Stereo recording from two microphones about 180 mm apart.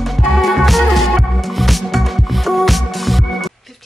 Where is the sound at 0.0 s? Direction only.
Centre (ahead or behind).